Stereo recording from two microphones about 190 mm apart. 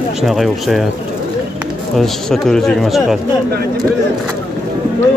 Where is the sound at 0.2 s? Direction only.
Centre (ahead or behind).